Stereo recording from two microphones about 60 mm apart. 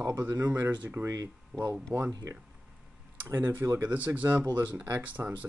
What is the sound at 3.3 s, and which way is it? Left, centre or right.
Speech, right.